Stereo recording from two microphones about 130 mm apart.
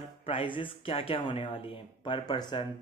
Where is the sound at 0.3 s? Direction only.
40° left (ahead or behind).